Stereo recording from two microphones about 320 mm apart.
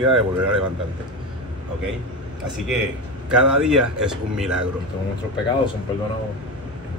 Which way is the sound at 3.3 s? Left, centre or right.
Centre.